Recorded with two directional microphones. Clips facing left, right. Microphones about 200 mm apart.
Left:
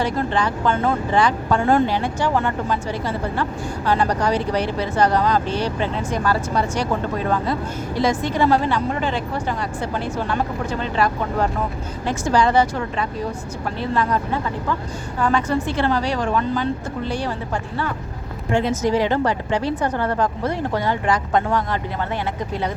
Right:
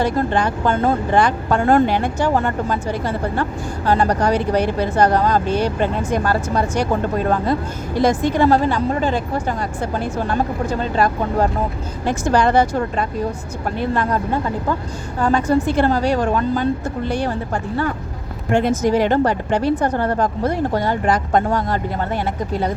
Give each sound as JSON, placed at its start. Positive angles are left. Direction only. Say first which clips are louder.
{"t": 0.0, "sound": "a woman's voice", "louder": "right 3 dB", "side_deg": -50}
{"t": 3.8, "sound": "a woman's voice", "louder": "right 3 dB", "side_deg": -45}
{"t": 7.9, "sound": "a woman's voice", "louder": "right 4 dB", "side_deg": -50}
{"t": 12.0, "sound": "a woman's voice", "louder": "right 2 dB", "side_deg": -55}
{"t": 15.2, "sound": "a woman's voice", "louder": "right 4 dB", "side_deg": -40}
{"t": 17.1, "sound": "speech", "louder": "right 4 dB", "side_deg": -55}
{"t": 18.5, "sound": "a woman's voice", "louder": "right 3 dB", "side_deg": -55}